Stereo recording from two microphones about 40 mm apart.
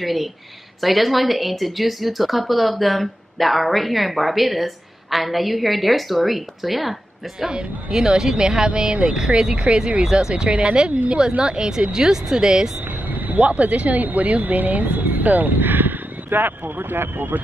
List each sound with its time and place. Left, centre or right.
0.0 s a woman's voice: centre
7.4 s speech: centre
10.0 s speech: centre
13.1 s vehicle: right
13.4 s speech: right